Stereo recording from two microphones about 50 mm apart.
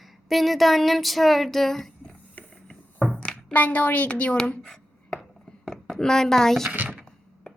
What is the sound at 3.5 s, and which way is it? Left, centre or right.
A woman's voice, left.